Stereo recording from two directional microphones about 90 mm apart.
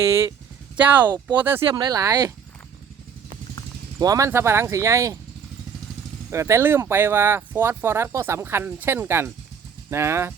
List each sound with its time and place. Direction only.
0.0 s speech: 30° right (ahead or behind)
1.7 s speech: 45° right (ahead or behind)
3.9 s speech: 40° right (ahead or behind)
6.3 s speech: 30° right (ahead or behind)